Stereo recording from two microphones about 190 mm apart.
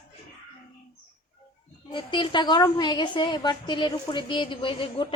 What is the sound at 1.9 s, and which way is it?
A woman's voice, 25° left (ahead or behind).